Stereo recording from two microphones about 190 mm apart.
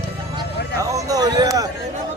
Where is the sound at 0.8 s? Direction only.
15° right (ahead or behind).